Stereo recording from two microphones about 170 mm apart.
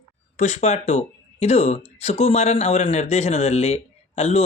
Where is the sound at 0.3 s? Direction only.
40° left (ahead or behind).